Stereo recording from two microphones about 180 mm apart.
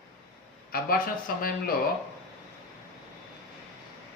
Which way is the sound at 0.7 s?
55° left (ahead or behind).